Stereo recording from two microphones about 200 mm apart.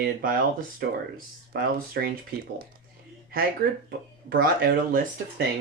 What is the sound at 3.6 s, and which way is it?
Speech, 45° right (ahead or behind).